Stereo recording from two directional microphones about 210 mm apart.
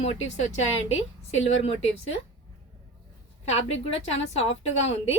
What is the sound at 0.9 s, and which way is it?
Speech, 65° left (ahead or behind).